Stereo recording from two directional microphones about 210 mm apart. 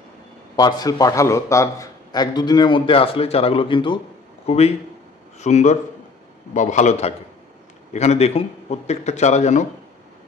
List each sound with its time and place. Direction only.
0.6 s a man's voice: 20° left (ahead or behind); by 9.7 s 35° left (ahead or behind)